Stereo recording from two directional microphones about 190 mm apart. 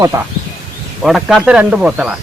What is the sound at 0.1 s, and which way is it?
Speech, 15° right (ahead or behind).